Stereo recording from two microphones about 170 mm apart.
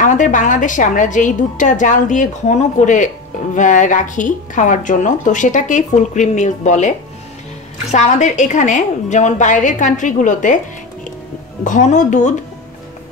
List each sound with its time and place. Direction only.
0.0 s a woman's voice: 50° left (ahead or behind)
11.6 s a woman's voice: 45° left (ahead or behind)